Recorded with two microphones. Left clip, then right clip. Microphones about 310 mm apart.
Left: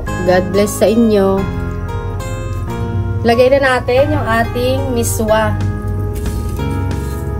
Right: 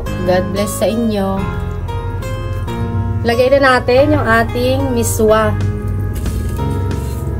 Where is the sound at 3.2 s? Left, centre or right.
Centre.